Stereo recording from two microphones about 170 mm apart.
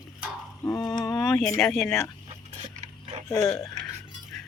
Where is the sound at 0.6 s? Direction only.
20° left (ahead or behind).